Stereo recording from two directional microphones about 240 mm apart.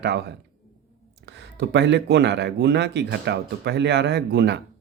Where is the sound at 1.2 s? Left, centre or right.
Right.